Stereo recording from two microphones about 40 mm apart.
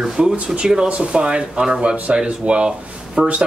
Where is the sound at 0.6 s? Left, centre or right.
Right.